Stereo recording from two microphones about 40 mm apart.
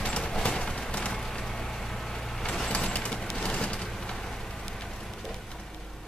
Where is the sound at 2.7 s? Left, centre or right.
Left.